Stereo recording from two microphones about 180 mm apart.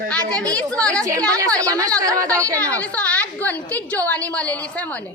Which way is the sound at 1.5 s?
20° right (ahead or behind).